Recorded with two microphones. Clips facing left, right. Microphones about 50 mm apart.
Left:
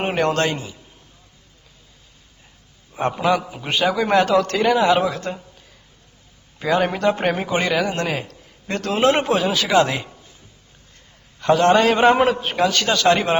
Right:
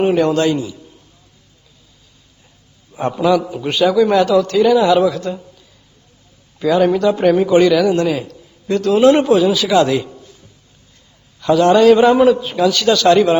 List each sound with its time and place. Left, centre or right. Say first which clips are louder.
0.0 s a man's voice: right 6 dB; left
2.9 s a man's voice: right 4 dB; left
6.6 s a man's voice: right 6 dB; left
11.3 s a man's voice: right 4 dB; left